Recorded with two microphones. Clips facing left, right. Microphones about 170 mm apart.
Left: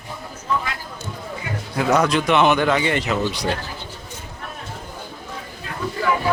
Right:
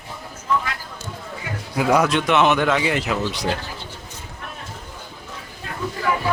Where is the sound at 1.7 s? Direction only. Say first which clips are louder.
Even; 10° right (ahead or behind).